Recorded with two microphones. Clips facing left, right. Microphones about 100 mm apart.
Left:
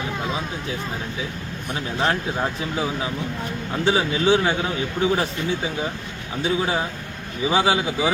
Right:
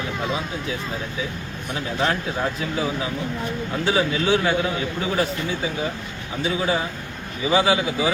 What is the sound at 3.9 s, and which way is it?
Speech, 25° left (ahead or behind).